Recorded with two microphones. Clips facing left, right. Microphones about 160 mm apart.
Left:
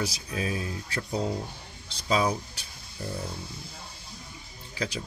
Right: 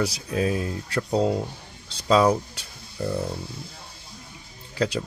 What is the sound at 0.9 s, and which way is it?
Speech, 70° right (ahead or behind).